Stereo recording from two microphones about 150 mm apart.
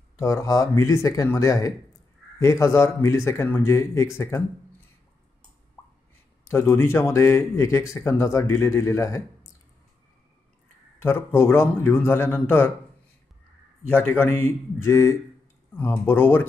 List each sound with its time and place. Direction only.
0.2 s speech: 20° left (ahead or behind)
5.8 s a sound: 5° left (ahead or behind)
6.4 s a man's voice: 15° left (ahead or behind)
11.0 s a man's voice: 15° left (ahead or behind)
13.8 s a man's voice: 15° left (ahead or behind)